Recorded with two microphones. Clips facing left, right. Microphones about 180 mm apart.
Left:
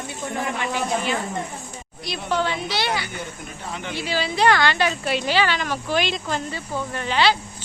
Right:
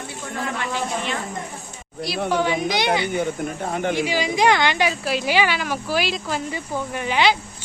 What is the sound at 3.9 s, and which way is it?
Speech, 15° right (ahead or behind).